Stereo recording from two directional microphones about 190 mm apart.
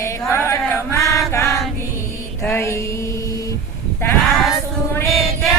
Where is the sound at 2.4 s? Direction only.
10° left (ahead or behind).